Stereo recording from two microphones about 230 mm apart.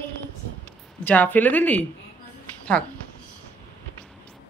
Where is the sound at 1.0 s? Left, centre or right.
Centre.